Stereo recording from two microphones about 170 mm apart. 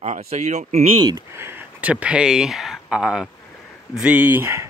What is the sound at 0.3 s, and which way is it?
Speech, 45° right (ahead or behind).